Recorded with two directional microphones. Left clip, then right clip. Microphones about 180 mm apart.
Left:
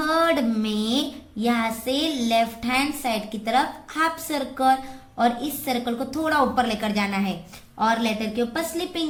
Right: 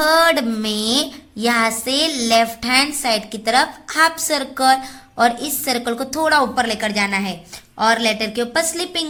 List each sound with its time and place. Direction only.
0.0 s child singing: 35° right (ahead or behind)
7.8 s child singing: 40° right (ahead or behind)